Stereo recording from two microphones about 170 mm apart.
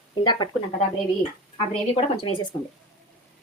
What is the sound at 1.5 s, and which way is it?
Speech, 35° left (ahead or behind).